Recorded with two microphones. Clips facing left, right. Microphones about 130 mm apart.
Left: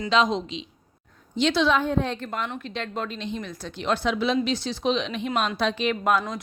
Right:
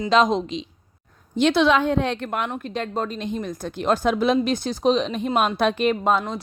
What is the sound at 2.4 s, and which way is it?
A woman's voice, 45° right (ahead or behind).